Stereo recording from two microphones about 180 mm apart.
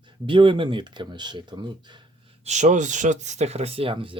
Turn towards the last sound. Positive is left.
turn(degrees=-30)  # may be behind; listen again after turning